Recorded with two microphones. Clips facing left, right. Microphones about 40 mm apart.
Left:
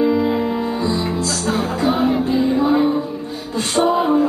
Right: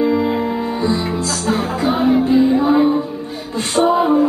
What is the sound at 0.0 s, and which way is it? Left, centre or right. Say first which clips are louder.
Music: even; centre.